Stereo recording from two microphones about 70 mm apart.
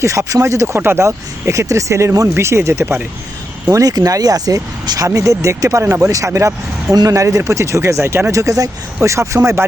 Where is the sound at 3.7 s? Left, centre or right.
Right.